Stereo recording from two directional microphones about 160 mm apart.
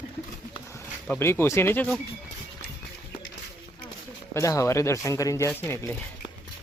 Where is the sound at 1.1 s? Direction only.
15° left (ahead or behind).